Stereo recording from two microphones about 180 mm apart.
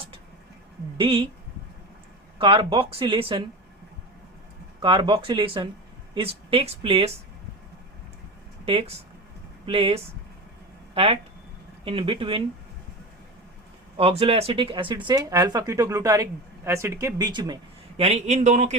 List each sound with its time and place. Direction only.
0.9 s speech: 30° right (ahead or behind)
2.4 s speech: 30° right (ahead or behind)
4.8 s speech: 25° right (ahead or behind)
8.6 s speech: 30° right (ahead or behind)
13.9 s speech: 35° right (ahead or behind)
18.0 s speech: 40° right (ahead or behind)